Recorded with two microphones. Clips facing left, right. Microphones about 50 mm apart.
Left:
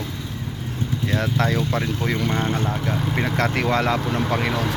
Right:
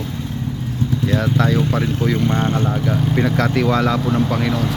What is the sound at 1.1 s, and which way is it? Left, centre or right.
Speech, centre.